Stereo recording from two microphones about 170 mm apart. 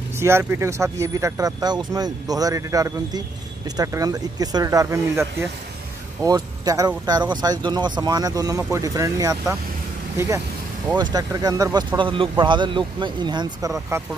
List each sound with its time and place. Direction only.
0.2 s speech: 15° right (ahead or behind)
6.2 s speech: 20° right (ahead or behind)